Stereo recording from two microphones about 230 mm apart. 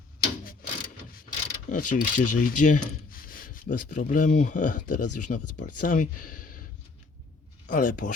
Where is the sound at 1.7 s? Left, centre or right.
Left.